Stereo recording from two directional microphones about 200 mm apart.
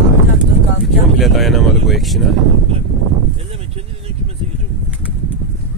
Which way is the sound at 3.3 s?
30° right (ahead or behind).